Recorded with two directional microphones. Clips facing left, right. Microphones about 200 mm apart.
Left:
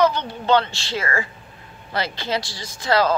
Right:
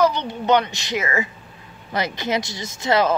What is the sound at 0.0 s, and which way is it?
A woman's voice, 20° right (ahead or behind).